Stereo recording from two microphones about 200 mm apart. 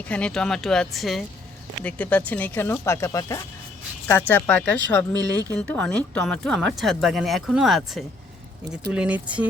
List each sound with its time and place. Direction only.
0.1 s speech: 5° left (ahead or behind)